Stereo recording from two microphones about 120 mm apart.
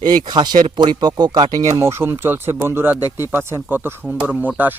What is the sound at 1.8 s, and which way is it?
Speech, 20° right (ahead or behind).